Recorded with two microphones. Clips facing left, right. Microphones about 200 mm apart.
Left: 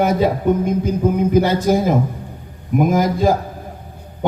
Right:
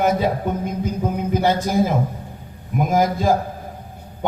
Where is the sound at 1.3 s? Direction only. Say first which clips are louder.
Even; 50° left (ahead or behind).